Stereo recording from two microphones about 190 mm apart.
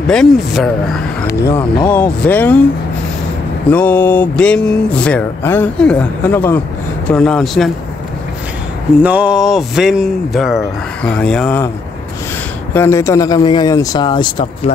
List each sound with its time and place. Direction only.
0.1 s speech: centre (ahead or behind)
1.2 s speech: 15° left (ahead or behind)
3.7 s speech: 10° left (ahead or behind)
9.0 s speech: 5° right (ahead or behind)
12.7 s a man's voice: 15° left (ahead or behind)